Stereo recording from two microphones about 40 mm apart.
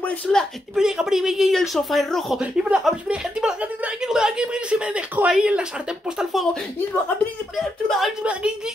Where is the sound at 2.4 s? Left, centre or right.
Right.